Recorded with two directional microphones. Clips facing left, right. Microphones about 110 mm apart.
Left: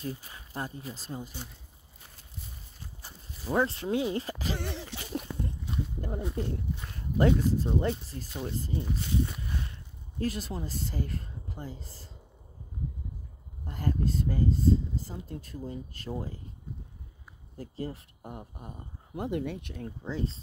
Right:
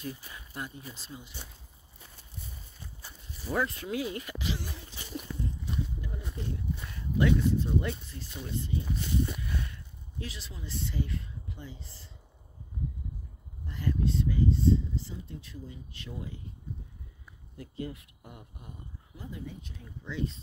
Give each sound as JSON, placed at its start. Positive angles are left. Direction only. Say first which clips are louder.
{"t": 0.0, "sound": "speech", "louder": "left 2 dB", "side_deg": 30}
{"t": 3.4, "sound": "speech", "louder": "left 4 dB", "side_deg": 30}
{"t": 4.6, "sound": "a sound", "louder": "left 6 dB", "side_deg": 70}
{"t": 5.9, "sound": "speech", "louder": "left 7 dB", "side_deg": 50}
{"t": 9.4, "sound": "a sound", "louder": "right 1 dB", "side_deg": 30}
{"t": 10.1, "sound": "speech", "louder": "left 10 dB", "side_deg": 45}
{"t": 13.7, "sound": "speech", "louder": "left 1 dB", "side_deg": 45}
{"t": 17.6, "sound": "speech", "louder": "left 2 dB", "side_deg": 35}
{"t": 19.1, "sound": "speech", "louder": "left 10 dB", "side_deg": 70}
{"t": 20.0, "sound": "speech", "louder": "even", "side_deg": 35}